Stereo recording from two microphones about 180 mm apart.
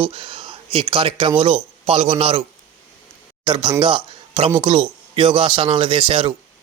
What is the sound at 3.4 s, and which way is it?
Speech, 25° right (ahead or behind).